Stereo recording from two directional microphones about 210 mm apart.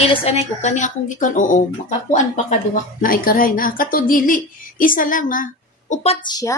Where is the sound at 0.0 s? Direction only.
30° left (ahead or behind).